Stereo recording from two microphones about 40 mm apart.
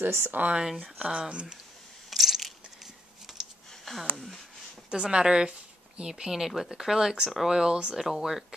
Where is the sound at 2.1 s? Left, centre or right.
Centre.